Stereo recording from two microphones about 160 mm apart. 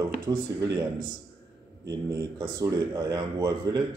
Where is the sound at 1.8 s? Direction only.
20° right (ahead or behind).